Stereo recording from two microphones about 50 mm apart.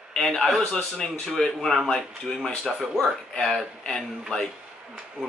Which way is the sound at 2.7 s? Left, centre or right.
Centre.